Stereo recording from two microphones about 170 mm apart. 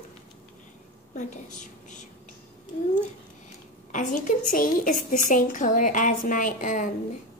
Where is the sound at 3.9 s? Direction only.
50° left (ahead or behind).